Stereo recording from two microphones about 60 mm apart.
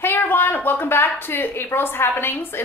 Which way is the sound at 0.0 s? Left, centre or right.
Left.